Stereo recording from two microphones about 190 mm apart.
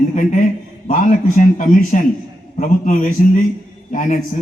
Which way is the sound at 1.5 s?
40° left (ahead or behind).